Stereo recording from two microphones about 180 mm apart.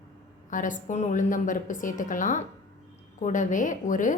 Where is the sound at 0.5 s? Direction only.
45° left (ahead or behind).